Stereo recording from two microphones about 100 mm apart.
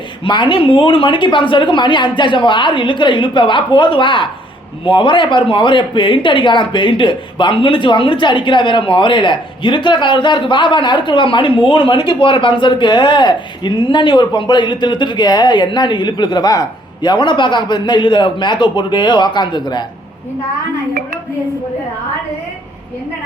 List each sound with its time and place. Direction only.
0.3 s speech: 55° left (ahead or behind)